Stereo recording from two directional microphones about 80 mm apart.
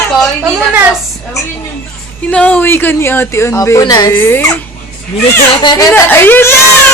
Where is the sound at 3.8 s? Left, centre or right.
Left.